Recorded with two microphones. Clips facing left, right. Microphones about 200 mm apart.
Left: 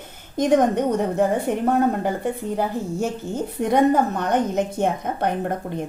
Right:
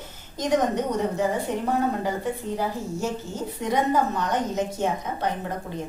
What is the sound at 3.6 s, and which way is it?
A woman's voice, 55° left (ahead or behind).